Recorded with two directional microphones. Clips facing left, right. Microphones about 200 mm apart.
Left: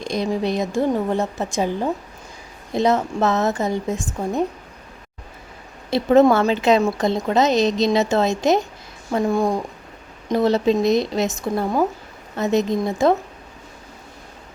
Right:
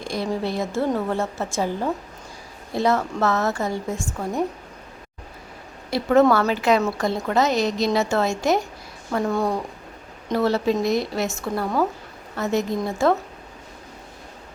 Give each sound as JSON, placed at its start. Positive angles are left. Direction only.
{"t": 0.0, "sound": "a woman's voice", "side_deg": 20}
{"t": 5.9, "sound": "a woman's voice", "side_deg": 20}